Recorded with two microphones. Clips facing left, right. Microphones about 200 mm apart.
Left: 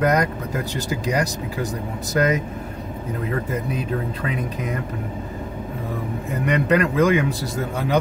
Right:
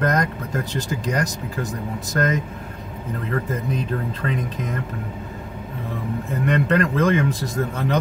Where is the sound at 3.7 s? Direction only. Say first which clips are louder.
Even; 10° left (ahead or behind).